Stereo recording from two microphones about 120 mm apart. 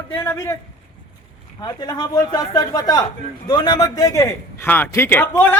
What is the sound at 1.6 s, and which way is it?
A man's voice, 35° left (ahead or behind).